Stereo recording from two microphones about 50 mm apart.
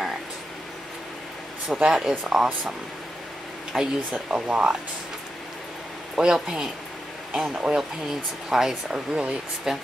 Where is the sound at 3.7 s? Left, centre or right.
Centre.